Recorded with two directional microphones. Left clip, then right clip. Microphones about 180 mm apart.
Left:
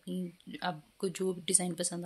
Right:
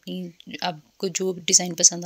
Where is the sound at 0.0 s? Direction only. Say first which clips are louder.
Right 6 dB; 40° right (ahead or behind).